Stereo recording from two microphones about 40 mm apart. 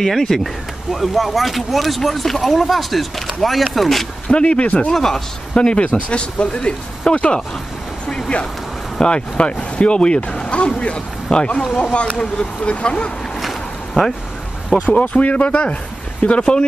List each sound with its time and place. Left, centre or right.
0.0 s speech: centre
4.3 s speech: left
4.9 s speech: centre
5.5 s speech: left
9.0 s speech: left
13.4 s boat: centre
14.8 s speech: left